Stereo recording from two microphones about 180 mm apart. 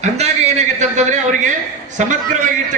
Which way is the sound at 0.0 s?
40° right (ahead or behind).